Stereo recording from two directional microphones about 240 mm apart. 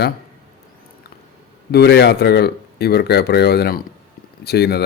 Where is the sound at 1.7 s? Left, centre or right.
Left.